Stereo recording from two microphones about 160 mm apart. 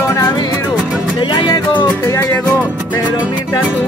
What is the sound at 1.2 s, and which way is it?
Music, 30° left (ahead or behind).